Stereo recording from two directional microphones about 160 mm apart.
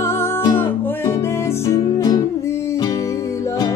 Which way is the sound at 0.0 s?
15° left (ahead or behind).